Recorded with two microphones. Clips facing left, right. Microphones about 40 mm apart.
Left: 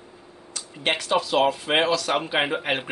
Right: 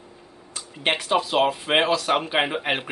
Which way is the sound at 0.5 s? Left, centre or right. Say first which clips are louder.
Right 1 dB; centre.